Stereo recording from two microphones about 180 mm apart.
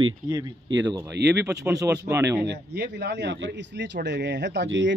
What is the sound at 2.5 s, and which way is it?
A man's voice, 70° right (ahead or behind).